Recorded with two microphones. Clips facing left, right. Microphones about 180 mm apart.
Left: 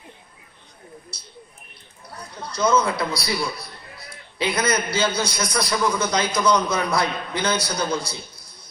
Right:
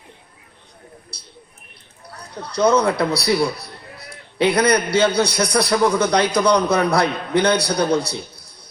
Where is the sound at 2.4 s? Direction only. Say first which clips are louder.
Right 4 dB; 65° right (ahead or behind).